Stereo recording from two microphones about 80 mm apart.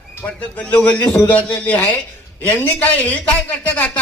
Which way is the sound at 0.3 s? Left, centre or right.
Centre.